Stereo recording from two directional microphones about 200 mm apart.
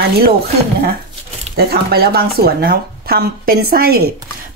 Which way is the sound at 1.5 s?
50° right (ahead or behind).